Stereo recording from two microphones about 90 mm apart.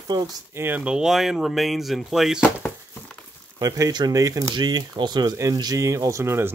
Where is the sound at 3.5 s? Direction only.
40° right (ahead or behind).